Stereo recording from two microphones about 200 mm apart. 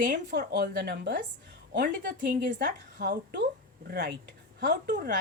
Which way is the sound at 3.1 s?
55° right (ahead or behind).